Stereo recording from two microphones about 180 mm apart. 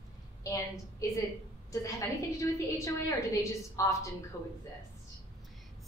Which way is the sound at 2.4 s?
15° left (ahead or behind).